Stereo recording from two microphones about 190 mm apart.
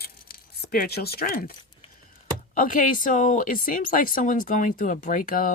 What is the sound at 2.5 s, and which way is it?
Speech, 45° left (ahead or behind).